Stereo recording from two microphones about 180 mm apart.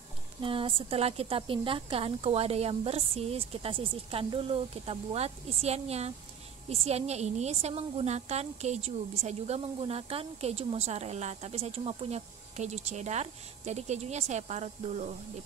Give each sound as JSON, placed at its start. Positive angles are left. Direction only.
{"t": 0.4, "sound": "speech", "side_deg": -30}